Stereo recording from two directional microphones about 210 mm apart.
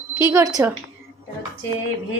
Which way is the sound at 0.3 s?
15° right (ahead or behind).